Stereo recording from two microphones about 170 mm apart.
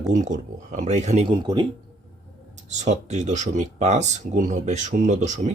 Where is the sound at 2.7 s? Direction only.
45° right (ahead or behind).